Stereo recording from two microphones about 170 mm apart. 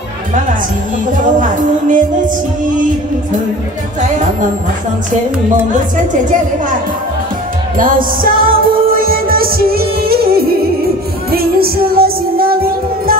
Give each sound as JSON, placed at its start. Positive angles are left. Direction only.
{"t": 1.4, "sound": "music", "side_deg": -50}
{"t": 7.7, "sound": "music", "side_deg": -55}